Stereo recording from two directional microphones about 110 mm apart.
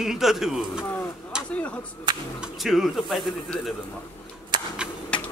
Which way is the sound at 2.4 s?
Centre (ahead or behind).